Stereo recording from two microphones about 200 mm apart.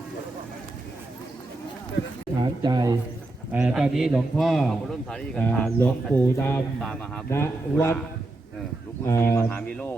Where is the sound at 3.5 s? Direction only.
5° right (ahead or behind); by 7.9 s 15° left (ahead or behind).